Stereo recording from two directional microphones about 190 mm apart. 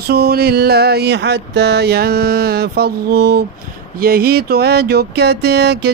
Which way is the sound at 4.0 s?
50° right (ahead or behind).